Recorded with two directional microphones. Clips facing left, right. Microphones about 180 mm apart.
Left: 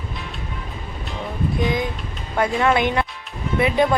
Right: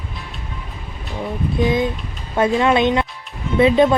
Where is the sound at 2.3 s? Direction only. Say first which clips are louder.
Right 3 dB; 25° right (ahead or behind).